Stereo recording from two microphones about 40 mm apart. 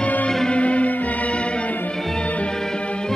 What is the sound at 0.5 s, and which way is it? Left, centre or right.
Music, left.